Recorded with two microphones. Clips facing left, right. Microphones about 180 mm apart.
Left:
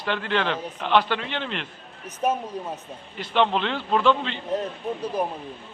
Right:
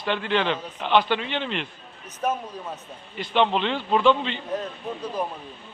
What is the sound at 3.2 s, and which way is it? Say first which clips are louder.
A man's voice: even; centre (ahead or behind).